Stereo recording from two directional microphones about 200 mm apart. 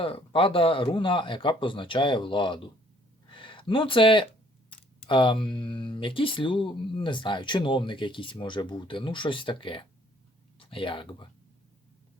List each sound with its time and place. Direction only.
0.0 s speech: 25° left (ahead or behind)
3.2 s a sound: 25° left (ahead or behind)
5.0 s speech: 25° left (ahead or behind)